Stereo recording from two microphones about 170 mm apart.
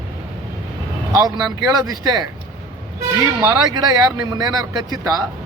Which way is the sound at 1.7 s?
20° right (ahead or behind).